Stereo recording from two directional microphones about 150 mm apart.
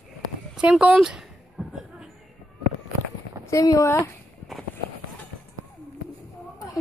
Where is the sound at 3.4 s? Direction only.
25° left (ahead or behind).